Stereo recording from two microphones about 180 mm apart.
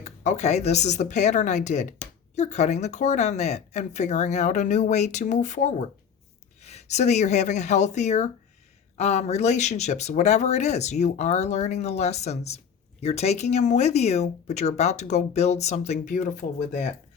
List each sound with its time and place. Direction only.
0.0 s speech: 40° left (ahead or behind)